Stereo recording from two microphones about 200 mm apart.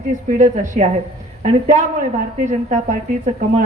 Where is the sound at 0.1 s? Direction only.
40° right (ahead or behind).